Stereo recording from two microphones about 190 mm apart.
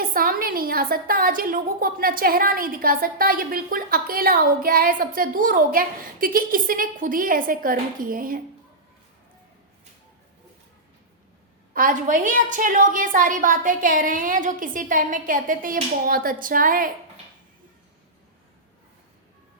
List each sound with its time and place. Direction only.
0.0 s a woman's voice: 50° right (ahead or behind)
11.7 s a woman's voice: 45° right (ahead or behind)